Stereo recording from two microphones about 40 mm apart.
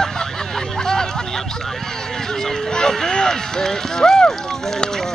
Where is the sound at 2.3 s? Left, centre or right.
Centre.